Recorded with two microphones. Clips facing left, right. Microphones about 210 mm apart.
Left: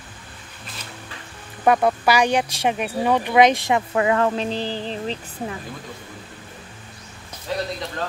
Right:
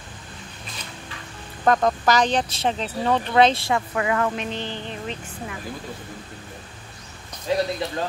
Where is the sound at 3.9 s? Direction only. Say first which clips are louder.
Left 4 dB; 30° left (ahead or behind).